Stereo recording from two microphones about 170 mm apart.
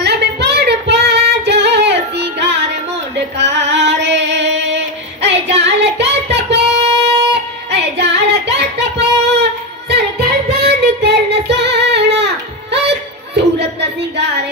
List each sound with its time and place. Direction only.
0.0 s female singing: 75° right (ahead or behind); by 5.3 s 90° right
5.6 s child singing: 90° right